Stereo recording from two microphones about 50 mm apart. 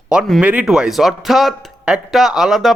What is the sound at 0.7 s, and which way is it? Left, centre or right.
Speech, centre.